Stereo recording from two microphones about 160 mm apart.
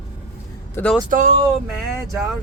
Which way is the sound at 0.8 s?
15° left (ahead or behind).